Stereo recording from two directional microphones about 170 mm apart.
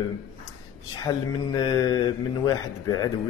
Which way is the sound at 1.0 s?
25° left (ahead or behind).